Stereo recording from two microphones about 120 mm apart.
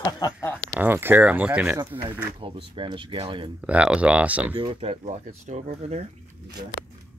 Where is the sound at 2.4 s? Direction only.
45° right (ahead or behind).